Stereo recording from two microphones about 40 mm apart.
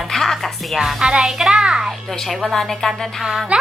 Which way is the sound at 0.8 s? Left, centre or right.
Centre.